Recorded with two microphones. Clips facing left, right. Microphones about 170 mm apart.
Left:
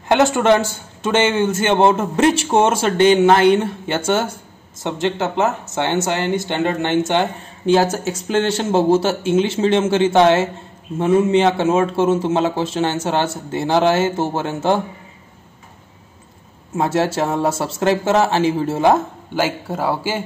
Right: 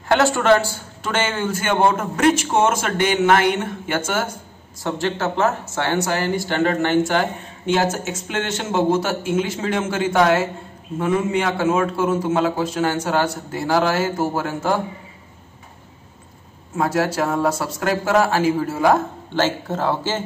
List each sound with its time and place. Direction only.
0.1 s a man's voice: 20° left (ahead or behind)
4.8 s a man's voice: 20° left (ahead or behind)
7.6 s a man's voice: 35° left (ahead or behind)
16.7 s a man's voice: 25° left (ahead or behind)
19.3 s speech: 10° left (ahead or behind)